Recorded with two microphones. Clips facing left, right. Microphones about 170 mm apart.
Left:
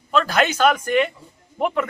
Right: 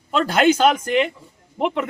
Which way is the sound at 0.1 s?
25° right (ahead or behind).